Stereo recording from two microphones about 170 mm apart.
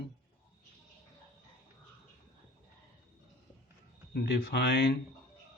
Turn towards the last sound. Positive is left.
turn(degrees=75)  # may be behind; listen again after turning